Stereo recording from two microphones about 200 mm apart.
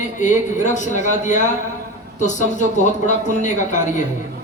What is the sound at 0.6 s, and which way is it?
A man's voice, 35° left (ahead or behind).